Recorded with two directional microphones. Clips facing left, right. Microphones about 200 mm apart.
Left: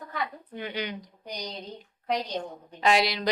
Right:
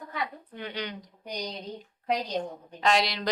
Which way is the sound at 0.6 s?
10° left (ahead or behind).